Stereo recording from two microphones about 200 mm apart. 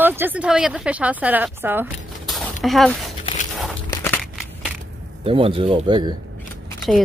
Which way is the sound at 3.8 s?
10° left (ahead or behind).